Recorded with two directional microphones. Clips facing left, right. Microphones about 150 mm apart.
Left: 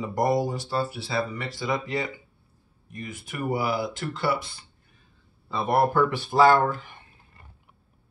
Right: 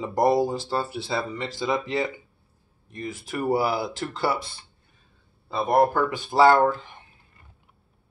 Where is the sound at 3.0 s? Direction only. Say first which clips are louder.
Right 4 dB; 30° right (ahead or behind).